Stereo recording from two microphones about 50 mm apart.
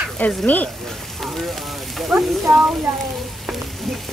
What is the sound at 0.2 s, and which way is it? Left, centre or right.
Speech, left.